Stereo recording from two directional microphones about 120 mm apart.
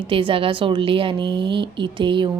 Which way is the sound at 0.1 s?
45° right (ahead or behind).